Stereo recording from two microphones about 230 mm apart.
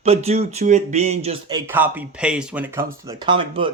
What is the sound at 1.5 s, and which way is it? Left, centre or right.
Speech, centre.